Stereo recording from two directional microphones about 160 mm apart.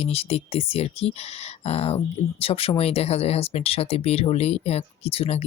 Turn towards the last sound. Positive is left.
turn(degrees=40)  # may be behind; listen again after turning